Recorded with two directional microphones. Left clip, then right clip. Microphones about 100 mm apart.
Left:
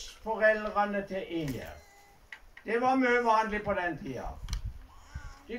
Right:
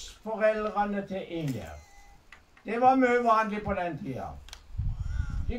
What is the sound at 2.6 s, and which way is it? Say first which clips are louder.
Speech: right 4 dB; 25° right (ahead or behind).